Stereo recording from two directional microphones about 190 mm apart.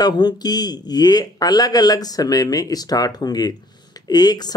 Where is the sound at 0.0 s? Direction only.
20° left (ahead or behind).